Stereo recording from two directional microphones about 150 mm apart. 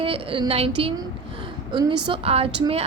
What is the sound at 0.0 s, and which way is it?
A woman's voice, 40° right (ahead or behind).